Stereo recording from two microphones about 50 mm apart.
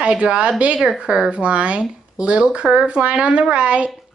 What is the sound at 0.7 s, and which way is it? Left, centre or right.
Speech, centre.